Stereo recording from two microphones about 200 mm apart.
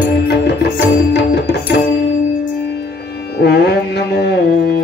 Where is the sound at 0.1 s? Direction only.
55° left (ahead or behind).